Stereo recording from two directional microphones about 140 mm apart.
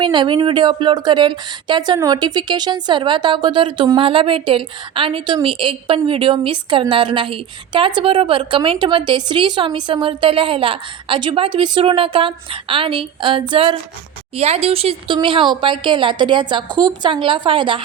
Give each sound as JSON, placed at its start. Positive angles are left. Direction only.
{"t": 0.0, "sound": "speech", "side_deg": -35}